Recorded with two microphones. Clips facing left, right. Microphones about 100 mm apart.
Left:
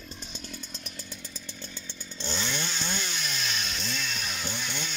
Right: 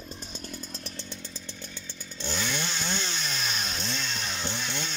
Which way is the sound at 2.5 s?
15° right (ahead or behind).